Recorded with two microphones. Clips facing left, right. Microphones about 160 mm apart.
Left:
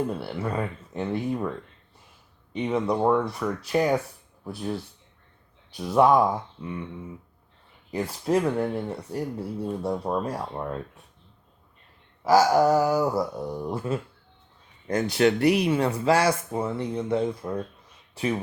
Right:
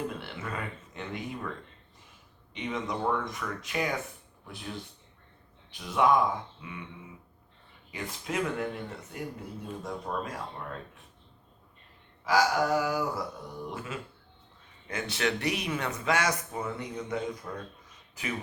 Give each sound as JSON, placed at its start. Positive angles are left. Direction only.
{"t": 0.2, "sound": "speech", "side_deg": 35}
{"t": 2.6, "sound": "speech", "side_deg": 35}
{"t": 7.9, "sound": "speech", "side_deg": 40}
{"t": 12.2, "sound": "speech", "side_deg": 40}